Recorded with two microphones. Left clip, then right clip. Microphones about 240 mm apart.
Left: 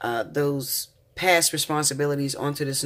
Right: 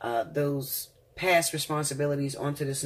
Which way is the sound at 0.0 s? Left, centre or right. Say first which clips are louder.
Left 3 dB; left.